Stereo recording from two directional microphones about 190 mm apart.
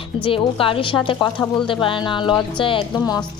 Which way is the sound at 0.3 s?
30° left (ahead or behind).